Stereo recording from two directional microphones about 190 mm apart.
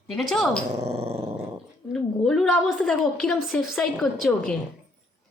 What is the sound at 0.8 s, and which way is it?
Dog, 30° right (ahead or behind).